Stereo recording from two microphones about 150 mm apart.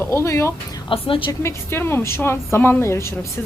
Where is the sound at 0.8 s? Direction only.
35° left (ahead or behind).